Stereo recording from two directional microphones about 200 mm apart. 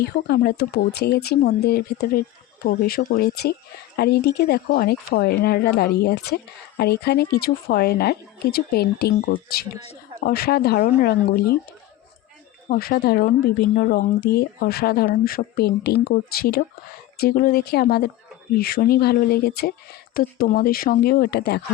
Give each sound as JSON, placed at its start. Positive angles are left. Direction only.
{"t": 0.0, "sound": "speech", "side_deg": 50}
{"t": 12.6, "sound": "speech", "side_deg": 45}